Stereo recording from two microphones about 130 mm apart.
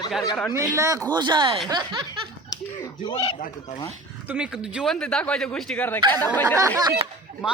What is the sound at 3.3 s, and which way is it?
Speech, 65° left (ahead or behind).